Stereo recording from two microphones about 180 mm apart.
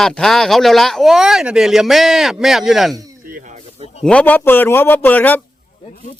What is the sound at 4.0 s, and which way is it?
A man's voice, 5° left (ahead or behind).